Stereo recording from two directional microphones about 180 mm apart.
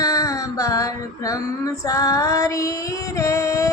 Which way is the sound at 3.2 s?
15° left (ahead or behind).